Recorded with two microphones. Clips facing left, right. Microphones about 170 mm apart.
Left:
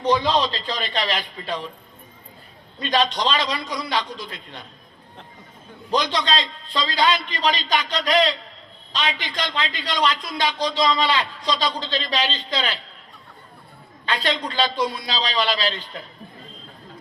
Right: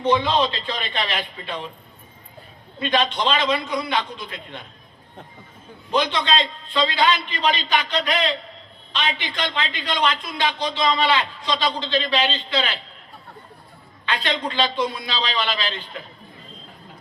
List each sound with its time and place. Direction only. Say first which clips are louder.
0.0 s a man's voice: even; 40° left (ahead or behind)
2.8 s a man's voice: even; 35° left (ahead or behind)
5.9 s a man's voice: right 1 dB; 40° left (ahead or behind)
14.0 s a man's voice: even; 40° left (ahead or behind)